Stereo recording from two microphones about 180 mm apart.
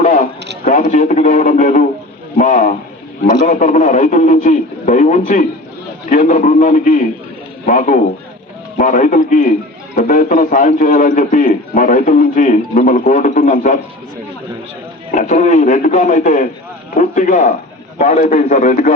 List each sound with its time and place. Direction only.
0.0 s a sound: 40° left (ahead or behind)
0.6 s a man's voice: 45° left (ahead or behind)
15.1 s a man's voice: 45° left (ahead or behind)